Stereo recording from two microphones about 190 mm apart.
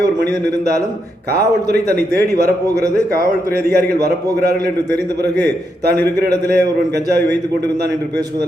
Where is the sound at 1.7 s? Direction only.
55° right (ahead or behind).